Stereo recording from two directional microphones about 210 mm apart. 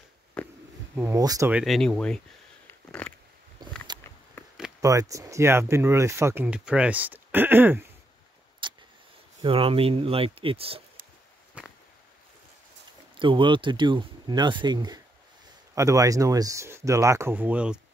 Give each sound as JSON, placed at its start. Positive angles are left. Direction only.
{"t": 0.4, "sound": "a sound", "side_deg": 5}
{"t": 0.9, "sound": "speech", "side_deg": -15}
{"t": 1.5, "sound": "speech", "side_deg": 0}
{"t": 3.6, "sound": "a sound", "side_deg": -20}
{"t": 4.8, "sound": "speech", "side_deg": -15}
{"t": 8.6, "sound": "vehicle", "side_deg": -25}
{"t": 9.4, "sound": "speech", "side_deg": -25}
{"t": 11.6, "sound": "a sound", "side_deg": -5}
{"t": 13.2, "sound": "speech", "side_deg": -25}